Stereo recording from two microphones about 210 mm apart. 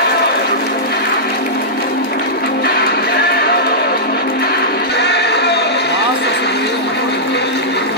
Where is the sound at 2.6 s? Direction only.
50° left (ahead or behind).